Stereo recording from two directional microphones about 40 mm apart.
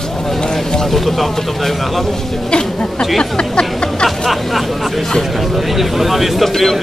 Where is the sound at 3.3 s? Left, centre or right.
Left.